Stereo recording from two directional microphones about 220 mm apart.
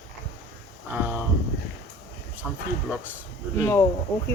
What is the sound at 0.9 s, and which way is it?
Speech, 10° right (ahead or behind).